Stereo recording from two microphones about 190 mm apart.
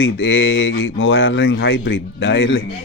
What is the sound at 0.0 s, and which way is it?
Speech, 85° left.